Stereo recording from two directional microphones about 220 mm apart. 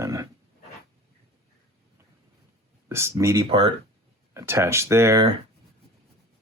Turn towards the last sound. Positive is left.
turn(degrees=-15)  # may be behind; listen again after turning